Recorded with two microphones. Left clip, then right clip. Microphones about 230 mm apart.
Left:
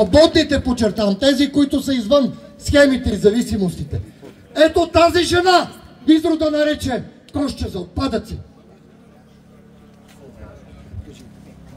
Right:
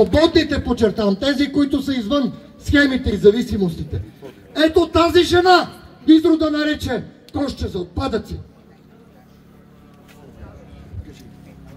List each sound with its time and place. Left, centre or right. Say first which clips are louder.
0.0 s speech: left 2 dB; left